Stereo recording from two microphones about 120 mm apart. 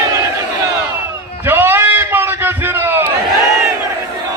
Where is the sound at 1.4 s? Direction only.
20° right (ahead or behind).